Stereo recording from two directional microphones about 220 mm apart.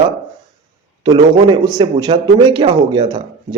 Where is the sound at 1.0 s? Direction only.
20° right (ahead or behind).